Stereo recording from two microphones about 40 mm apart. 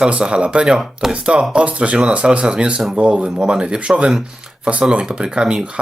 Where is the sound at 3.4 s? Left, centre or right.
Centre.